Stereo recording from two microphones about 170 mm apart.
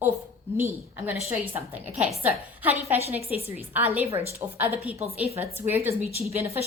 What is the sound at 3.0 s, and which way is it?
Speech, 35° right (ahead or behind).